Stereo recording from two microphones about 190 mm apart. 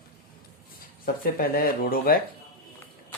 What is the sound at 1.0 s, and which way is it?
Speech, 50° left (ahead or behind).